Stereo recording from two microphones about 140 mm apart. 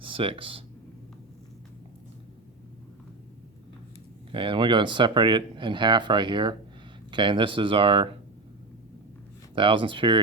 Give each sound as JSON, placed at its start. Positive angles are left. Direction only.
{"t": 0.0, "sound": "speech", "side_deg": -40}
{"t": 4.3, "sound": "speech", "side_deg": -35}
{"t": 9.6, "sound": "speech", "side_deg": -35}